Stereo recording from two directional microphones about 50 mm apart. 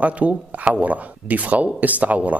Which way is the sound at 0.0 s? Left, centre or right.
Right.